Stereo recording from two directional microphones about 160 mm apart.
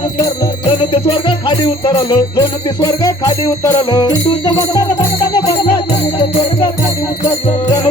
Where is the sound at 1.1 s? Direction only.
30° left (ahead or behind).